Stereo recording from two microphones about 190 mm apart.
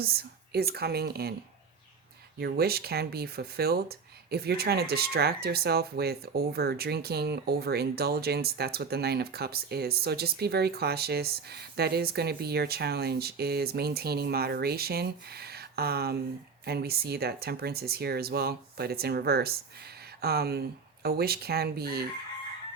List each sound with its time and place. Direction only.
0.0 s speech: 55° right (ahead or behind)
2.4 s speech: 55° right (ahead or behind)